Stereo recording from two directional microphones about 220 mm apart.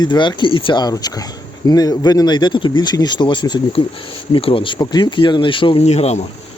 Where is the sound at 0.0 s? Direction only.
20° left (ahead or behind).